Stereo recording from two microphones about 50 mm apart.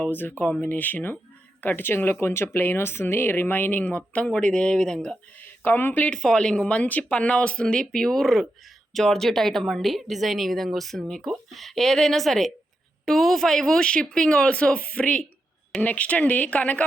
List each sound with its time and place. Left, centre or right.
0.0 s speech: left; by 5.1 s centre
5.6 s speech: left
6.1 s speech: centre
6.7 s a woman's voice: left